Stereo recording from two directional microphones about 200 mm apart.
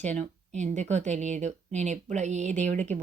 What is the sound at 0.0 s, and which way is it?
Speech, 35° right (ahead or behind).